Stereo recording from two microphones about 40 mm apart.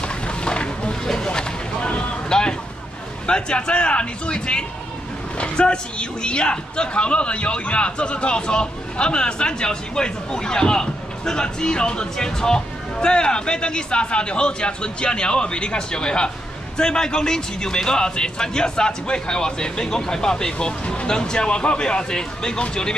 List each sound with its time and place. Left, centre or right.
0.0 s a sound: left
1.0 s vehicle: centre
2.2 s vehicle: centre
3.3 s a man's voice: left